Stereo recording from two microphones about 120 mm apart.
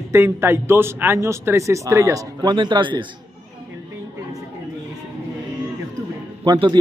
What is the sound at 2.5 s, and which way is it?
Speech, 40° right (ahead or behind).